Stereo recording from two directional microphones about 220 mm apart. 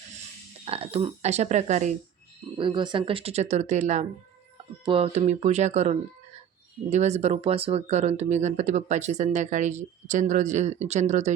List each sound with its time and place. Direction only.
0.6 s speech: 25° right (ahead or behind)
2.6 s speech: 20° right (ahead or behind)